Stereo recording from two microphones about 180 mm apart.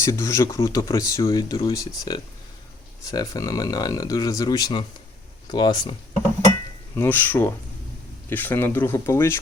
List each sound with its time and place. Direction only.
0.0 s speech: 15° left (ahead or behind)
6.9 s speech: 10° left (ahead or behind)